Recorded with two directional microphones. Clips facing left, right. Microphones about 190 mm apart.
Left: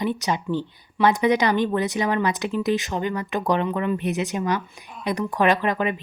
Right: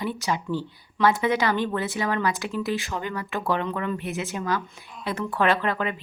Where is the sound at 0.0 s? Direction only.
20° left (ahead or behind).